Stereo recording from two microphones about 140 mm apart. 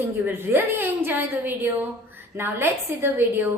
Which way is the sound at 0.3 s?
15° right (ahead or behind).